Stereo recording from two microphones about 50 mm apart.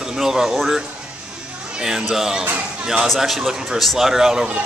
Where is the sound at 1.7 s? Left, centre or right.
Centre.